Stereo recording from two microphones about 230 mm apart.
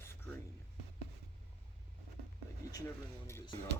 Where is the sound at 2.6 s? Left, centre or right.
Centre.